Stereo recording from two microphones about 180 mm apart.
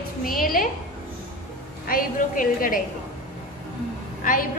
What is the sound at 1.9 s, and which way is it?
Speech, 50° left (ahead or behind).